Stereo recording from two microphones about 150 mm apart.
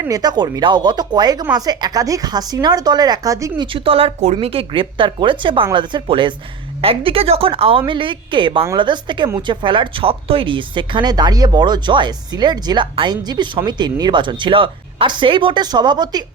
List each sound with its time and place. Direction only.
0.0 s speech: 25° right (ahead or behind)
3.7 s speech: 35° right (ahead or behind)